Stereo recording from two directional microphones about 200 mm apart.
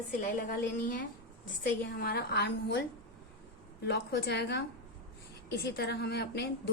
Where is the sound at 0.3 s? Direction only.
45° left (ahead or behind).